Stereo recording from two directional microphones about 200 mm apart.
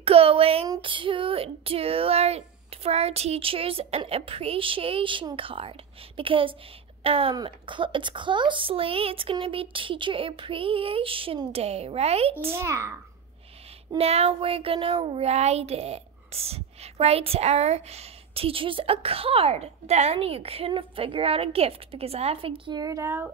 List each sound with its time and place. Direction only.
0.0 s speech: 30° right (ahead or behind)
12.5 s a child's voice: 15° right (ahead or behind)
13.9 s speech: 30° right (ahead or behind); by 23.3 s 10° right (ahead or behind)